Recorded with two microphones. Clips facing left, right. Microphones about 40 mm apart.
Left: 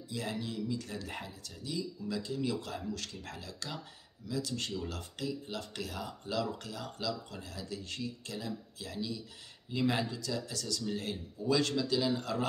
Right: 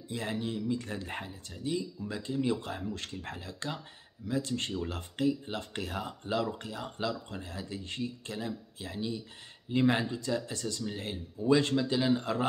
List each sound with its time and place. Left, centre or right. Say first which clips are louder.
0.1 s speech: right 3 dB; right